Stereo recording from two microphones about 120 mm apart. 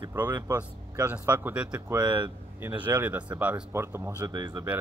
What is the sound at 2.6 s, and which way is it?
Speech, 15° right (ahead or behind).